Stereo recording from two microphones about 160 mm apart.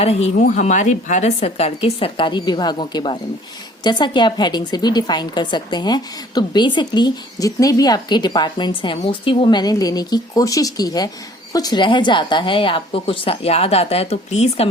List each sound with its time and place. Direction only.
0.0 s a woman's voice: 40° left (ahead or behind)
0.3 s a woman's voice: 50° left (ahead or behind)